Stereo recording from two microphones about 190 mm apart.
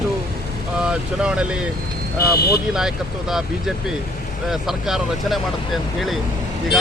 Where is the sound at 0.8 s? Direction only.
5° right (ahead or behind).